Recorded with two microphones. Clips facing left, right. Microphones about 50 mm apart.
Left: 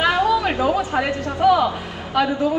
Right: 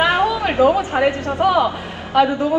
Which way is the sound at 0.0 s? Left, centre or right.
Right.